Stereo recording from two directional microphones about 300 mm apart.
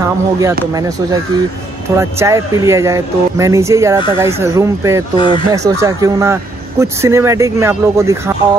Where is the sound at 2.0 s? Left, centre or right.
Centre.